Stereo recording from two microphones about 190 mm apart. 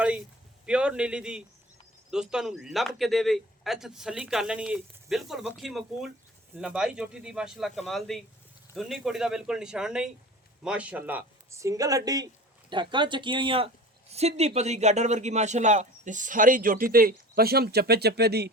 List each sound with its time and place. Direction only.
0.6 s a man's voice: 5° right (ahead or behind); by 18.5 s 60° right (ahead or behind)